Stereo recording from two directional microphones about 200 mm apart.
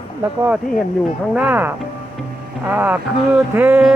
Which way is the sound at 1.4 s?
10° right (ahead or behind).